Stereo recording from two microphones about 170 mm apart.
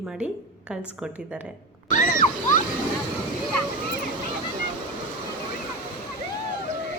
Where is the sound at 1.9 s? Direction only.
50° left (ahead or behind).